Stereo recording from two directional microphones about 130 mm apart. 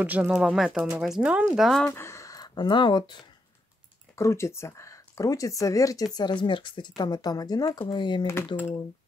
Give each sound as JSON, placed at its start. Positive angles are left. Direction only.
{"t": 0.0, "sound": "speech", "side_deg": -10}
{"t": 1.9, "sound": "speech", "side_deg": 20}
{"t": 4.1, "sound": "speech", "side_deg": 20}
{"t": 6.1, "sound": "speech", "side_deg": 35}
{"t": 8.5, "sound": "speech", "side_deg": 20}